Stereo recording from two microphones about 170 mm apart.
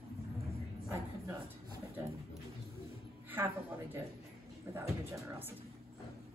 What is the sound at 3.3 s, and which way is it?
Music, 10° right (ahead or behind).